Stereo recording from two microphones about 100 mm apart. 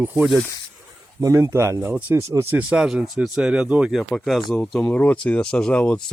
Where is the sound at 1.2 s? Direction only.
30° right (ahead or behind).